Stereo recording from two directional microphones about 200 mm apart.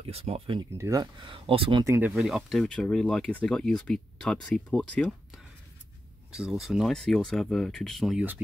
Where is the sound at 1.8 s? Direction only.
15° right (ahead or behind).